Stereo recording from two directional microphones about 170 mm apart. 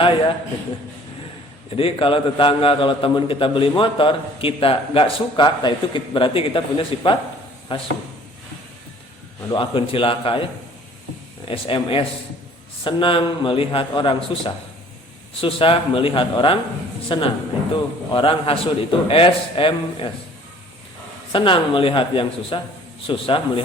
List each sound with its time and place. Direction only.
1.7 s a man's voice: 30° left (ahead or behind)
9.5 s a man's voice: 30° left (ahead or behind)
11.4 s a man's voice: 30° left (ahead or behind)
21.3 s a man's voice: 30° left (ahead or behind)